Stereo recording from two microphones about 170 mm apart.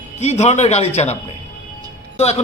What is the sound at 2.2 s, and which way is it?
Speech, 40° left (ahead or behind).